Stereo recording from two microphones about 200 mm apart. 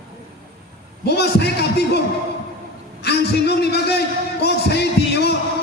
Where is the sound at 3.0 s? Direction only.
55° left (ahead or behind).